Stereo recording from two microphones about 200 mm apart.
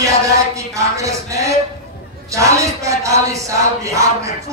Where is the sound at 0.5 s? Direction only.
15° right (ahead or behind).